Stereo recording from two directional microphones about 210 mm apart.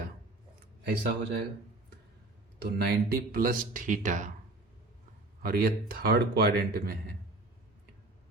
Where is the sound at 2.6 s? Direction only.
45° right (ahead or behind).